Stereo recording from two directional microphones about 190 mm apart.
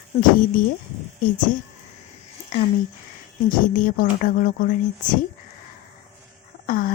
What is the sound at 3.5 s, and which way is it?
Speech, 45° left (ahead or behind).